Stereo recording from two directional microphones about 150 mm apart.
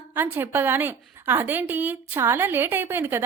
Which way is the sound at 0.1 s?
15° right (ahead or behind).